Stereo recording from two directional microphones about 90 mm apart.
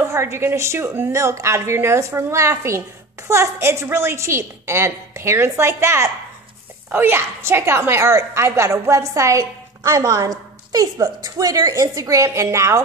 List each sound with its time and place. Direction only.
0.1 s a woman's voice: 30° right (ahead or behind)